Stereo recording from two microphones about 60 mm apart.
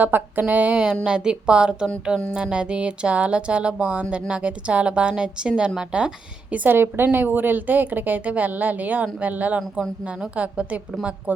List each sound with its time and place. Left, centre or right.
0.0 s a woman's voice: right
6.7 s speech: right